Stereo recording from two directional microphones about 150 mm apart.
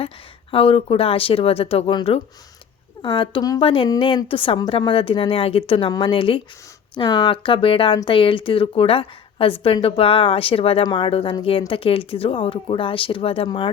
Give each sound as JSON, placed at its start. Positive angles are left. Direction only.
{"t": 0.5, "sound": "a woman's voice", "side_deg": 40}